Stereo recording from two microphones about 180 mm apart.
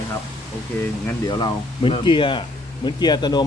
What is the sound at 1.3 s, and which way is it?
Speech, 25° left (ahead or behind).